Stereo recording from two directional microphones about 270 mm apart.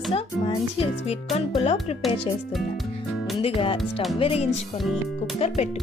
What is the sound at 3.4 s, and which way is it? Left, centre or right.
Speech, centre.